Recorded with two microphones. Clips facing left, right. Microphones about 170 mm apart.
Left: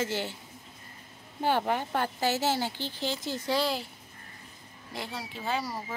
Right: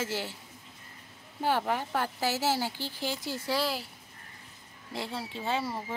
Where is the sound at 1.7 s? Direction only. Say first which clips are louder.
Left 1 dB; centre (ahead or behind).